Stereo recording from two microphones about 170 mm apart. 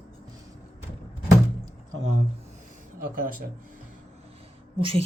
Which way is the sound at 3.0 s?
55° right (ahead or behind).